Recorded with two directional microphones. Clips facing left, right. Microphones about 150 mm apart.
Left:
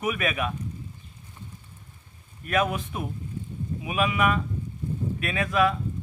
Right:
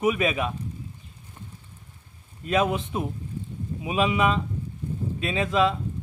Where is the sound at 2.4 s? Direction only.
25° right (ahead or behind).